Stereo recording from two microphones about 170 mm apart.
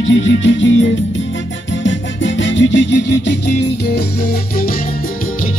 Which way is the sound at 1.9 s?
90° left.